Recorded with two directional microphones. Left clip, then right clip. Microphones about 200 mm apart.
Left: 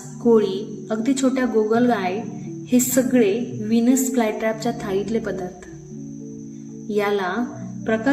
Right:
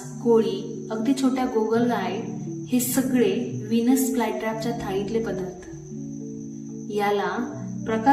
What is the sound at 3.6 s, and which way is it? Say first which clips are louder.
A woman's voice: left 3 dB; 35° left (ahead or behind).